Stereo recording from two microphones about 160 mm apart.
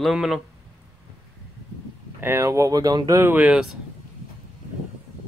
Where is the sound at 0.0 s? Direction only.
Centre (ahead or behind).